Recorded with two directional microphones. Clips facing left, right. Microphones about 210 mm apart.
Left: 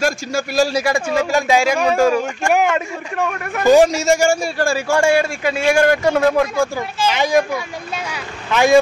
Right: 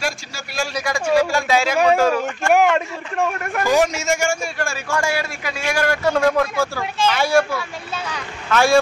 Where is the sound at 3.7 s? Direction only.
30° left (ahead or behind).